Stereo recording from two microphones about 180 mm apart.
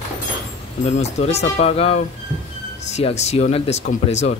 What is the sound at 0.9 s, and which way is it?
Speech, 40° left (ahead or behind).